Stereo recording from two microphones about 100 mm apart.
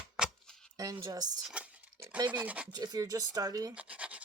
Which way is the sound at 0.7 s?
35° right (ahead or behind).